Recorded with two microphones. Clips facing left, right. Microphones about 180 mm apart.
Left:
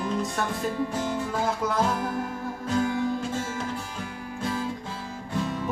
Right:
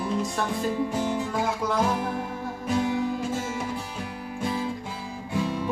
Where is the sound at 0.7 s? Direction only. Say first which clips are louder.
Right 2 dB; 10° right (ahead or behind).